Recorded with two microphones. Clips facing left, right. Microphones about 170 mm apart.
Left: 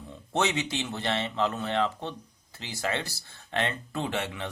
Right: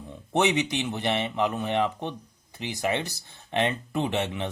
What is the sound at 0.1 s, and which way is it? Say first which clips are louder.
A man's voice: right 4 dB; 15° right (ahead or behind).